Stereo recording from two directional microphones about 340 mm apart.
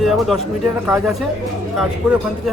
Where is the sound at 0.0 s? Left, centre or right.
Centre.